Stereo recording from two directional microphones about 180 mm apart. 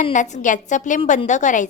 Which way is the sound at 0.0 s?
45° left (ahead or behind).